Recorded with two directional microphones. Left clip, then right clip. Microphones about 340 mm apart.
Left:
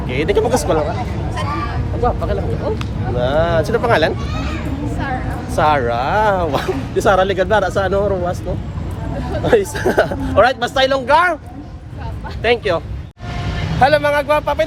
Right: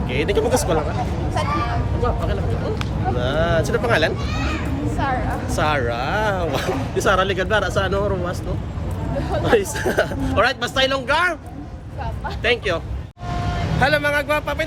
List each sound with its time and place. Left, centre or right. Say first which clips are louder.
0.1 s speech: left 4 dB; centre
2.0 s speech: left 7 dB; centre
5.5 s speech: left 7 dB; centre
9.5 s speech: left 5 dB; centre
12.4 s speech: left 5 dB; centre